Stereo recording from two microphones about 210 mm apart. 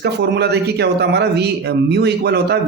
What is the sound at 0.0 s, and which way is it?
Speech, 55° right (ahead or behind).